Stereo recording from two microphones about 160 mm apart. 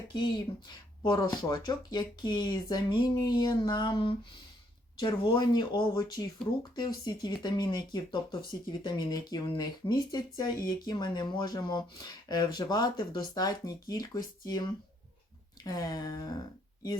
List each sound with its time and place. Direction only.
0.1 s speech: 25° left (ahead or behind)
15.6 s speech: 25° left (ahead or behind)